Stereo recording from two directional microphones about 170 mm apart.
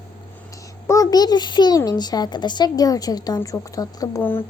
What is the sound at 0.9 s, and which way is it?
A child's voice, 20° left (ahead or behind).